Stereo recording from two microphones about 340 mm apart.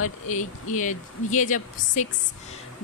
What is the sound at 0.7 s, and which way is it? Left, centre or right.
Speech, left.